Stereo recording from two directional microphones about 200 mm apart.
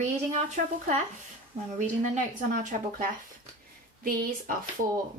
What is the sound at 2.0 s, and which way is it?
Speech, 40° right (ahead or behind).